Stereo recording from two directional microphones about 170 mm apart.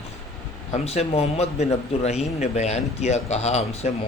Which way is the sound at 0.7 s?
40° left (ahead or behind).